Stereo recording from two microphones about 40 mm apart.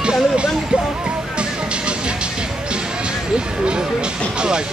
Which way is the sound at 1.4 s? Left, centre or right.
Right.